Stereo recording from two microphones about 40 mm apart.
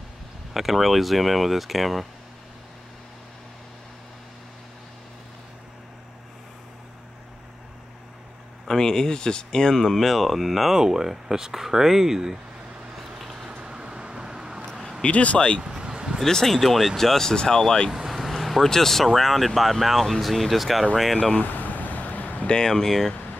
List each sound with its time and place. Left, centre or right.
0.5 s speech: centre
8.6 s speech: centre
9.9 s speech: centre
10.8 s speech: centre
13.2 s vehicle: centre
13.7 s vehicle: right
15.0 s speech: left
15.6 s vehicle: centre
16.3 s speech: centre
16.5 s speech: centre
17.9 s speech: centre
21.4 s vehicle: left
22.5 s speech: centre